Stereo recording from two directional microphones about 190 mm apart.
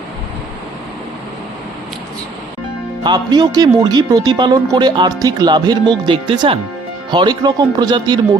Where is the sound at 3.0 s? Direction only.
20° right (ahead or behind).